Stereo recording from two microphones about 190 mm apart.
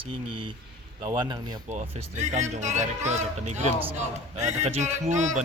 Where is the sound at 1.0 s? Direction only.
25° right (ahead or behind).